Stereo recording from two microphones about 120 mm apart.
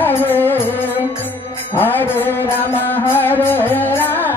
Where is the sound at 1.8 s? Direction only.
15° left (ahead or behind).